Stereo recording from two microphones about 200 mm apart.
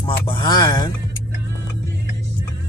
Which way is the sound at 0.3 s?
20° left (ahead or behind).